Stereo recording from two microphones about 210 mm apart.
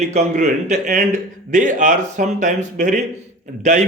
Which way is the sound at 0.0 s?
35° right (ahead or behind).